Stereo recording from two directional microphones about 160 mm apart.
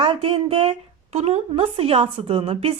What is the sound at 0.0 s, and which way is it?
A woman's voice, 35° right (ahead or behind).